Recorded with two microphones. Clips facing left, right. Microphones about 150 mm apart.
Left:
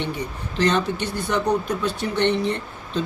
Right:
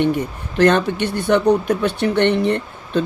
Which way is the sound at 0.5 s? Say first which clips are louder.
Right 6 dB; 55° right (ahead or behind).